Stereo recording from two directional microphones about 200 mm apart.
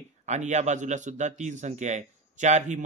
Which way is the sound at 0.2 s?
35° right (ahead or behind).